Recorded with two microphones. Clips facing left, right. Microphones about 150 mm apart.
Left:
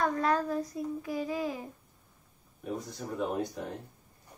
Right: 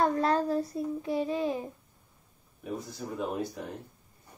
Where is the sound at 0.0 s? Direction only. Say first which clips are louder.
Right 2 dB; 30° right (ahead or behind).